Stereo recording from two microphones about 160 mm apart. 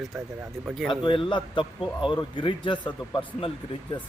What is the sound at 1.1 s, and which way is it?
Speech, 30° left (ahead or behind).